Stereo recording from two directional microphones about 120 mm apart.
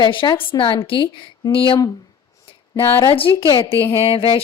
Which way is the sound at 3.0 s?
50° left (ahead or behind).